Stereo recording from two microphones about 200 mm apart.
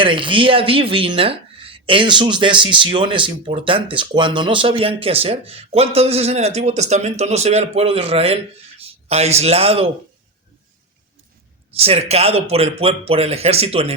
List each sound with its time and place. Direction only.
0.0 s a man's voice: 25° right (ahead or behind)
11.7 s speech: 30° right (ahead or behind)